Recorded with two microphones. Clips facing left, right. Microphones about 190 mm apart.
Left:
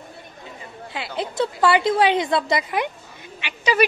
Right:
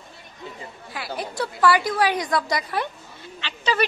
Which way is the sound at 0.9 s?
20° left (ahead or behind).